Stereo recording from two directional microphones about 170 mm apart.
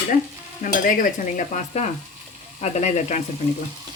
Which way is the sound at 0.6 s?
55° left (ahead or behind).